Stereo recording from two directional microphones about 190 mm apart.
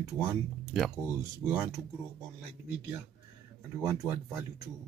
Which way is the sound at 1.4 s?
Centre (ahead or behind).